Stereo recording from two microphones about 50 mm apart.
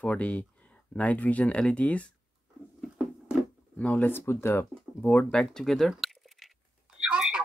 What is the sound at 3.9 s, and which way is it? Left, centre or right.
Speech, left.